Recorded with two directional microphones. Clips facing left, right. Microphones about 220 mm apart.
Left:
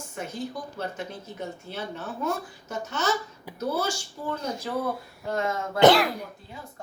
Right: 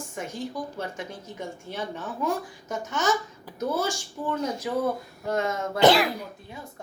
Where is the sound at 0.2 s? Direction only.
15° right (ahead or behind).